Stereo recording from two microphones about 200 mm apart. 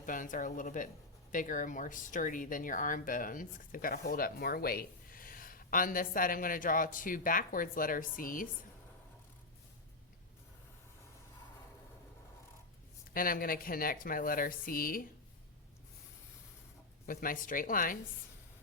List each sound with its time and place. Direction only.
0.0 s speech: 40° left (ahead or behind)
13.1 s speech: 45° left (ahead or behind)
17.1 s speech: 45° left (ahead or behind)